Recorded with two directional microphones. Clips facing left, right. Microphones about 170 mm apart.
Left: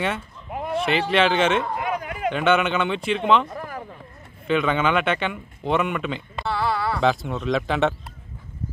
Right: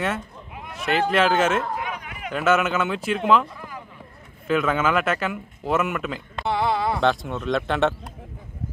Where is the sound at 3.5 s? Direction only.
60° left (ahead or behind).